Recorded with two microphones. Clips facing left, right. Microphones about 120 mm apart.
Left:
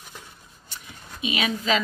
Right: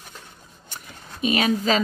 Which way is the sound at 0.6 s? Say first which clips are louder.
Right 2 dB; 50° right (ahead or behind).